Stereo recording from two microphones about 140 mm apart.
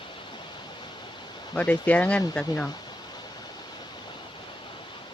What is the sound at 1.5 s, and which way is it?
Speech, 10° left (ahead or behind).